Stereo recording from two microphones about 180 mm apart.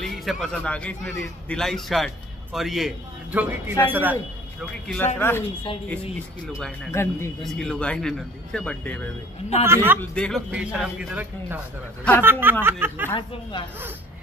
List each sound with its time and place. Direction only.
0.0 s a man's voice: centre (ahead or behind)
4.8 s speech: 10° left (ahead or behind)
6.4 s a man's voice: centre (ahead or behind)
6.9 s speech: 15° left (ahead or behind)
7.4 s a man's voice: 5° left (ahead or behind)
9.7 s speech: 15° right (ahead or behind)
9.9 s a man's voice: 5° left (ahead or behind)
10.5 s speech: 5° right (ahead or behind)
13.1 s speech: 30° left (ahead or behind)